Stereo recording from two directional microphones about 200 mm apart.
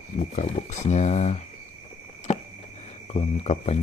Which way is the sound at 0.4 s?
35° left (ahead or behind).